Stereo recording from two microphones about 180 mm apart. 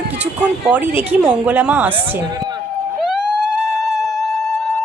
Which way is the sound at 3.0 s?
5° right (ahead or behind).